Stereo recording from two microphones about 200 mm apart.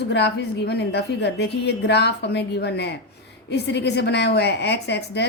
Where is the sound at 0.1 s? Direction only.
55° left (ahead or behind).